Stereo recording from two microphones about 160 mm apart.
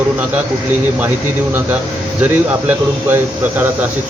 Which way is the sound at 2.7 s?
10° right (ahead or behind).